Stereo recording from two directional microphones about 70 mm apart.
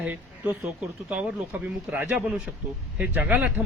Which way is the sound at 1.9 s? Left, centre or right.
Right.